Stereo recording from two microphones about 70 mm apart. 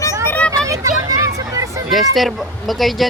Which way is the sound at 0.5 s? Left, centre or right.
Right.